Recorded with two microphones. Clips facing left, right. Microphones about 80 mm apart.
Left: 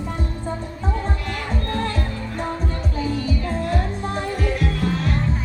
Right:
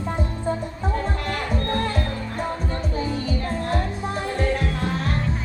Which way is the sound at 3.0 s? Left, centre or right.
Right.